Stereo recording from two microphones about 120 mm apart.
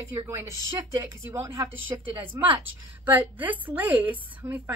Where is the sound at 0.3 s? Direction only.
25° right (ahead or behind).